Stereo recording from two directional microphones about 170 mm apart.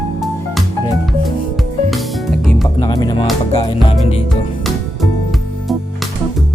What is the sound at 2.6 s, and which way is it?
Music, 25° left (ahead or behind).